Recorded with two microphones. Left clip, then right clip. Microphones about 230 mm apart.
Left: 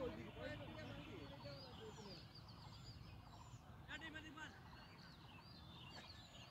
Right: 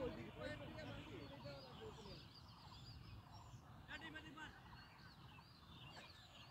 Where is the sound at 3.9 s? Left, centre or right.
Left.